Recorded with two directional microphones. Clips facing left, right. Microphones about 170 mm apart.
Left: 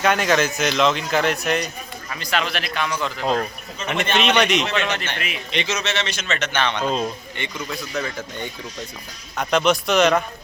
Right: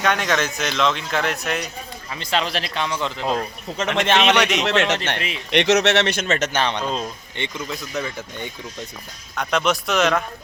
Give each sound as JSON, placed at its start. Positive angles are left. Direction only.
{"t": 0.0, "sound": "speech", "side_deg": 0}
{"t": 2.0, "sound": "speech", "side_deg": -25}
{"t": 3.8, "sound": "a man's voice", "side_deg": -90}
{"t": 4.4, "sound": "speech", "side_deg": 0}
{"t": 4.6, "sound": "speech", "side_deg": -80}
{"t": 5.1, "sound": "speech", "side_deg": -30}
{"t": 5.5, "sound": "speech", "side_deg": -70}
{"t": 7.3, "sound": "speech", "side_deg": -25}
{"t": 9.3, "sound": "speech", "side_deg": 0}